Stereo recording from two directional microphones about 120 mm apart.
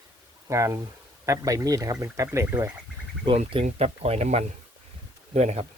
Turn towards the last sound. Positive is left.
turn(degrees=-65)  # may be behind; listen again after turning